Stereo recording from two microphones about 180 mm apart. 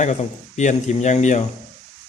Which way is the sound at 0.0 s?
40° left (ahead or behind).